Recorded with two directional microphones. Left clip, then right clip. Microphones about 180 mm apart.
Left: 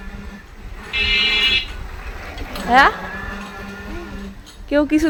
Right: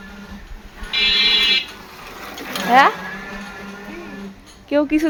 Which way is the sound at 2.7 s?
5° right (ahead or behind).